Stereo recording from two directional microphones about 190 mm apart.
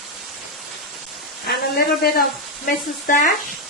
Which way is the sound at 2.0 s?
55° left (ahead or behind).